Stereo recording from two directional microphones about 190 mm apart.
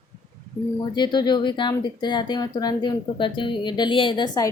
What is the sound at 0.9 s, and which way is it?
Speech, 20° left (ahead or behind).